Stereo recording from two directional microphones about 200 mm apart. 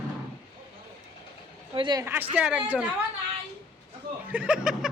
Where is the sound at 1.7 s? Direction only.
20° right (ahead or behind).